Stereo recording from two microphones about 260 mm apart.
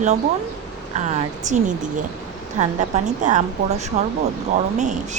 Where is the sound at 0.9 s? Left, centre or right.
Right.